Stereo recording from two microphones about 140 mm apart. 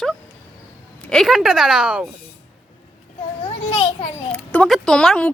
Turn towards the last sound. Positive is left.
turn(degrees=5)  # may be behind; listen again after turning